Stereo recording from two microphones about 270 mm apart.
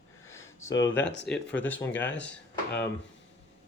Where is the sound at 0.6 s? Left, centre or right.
Centre.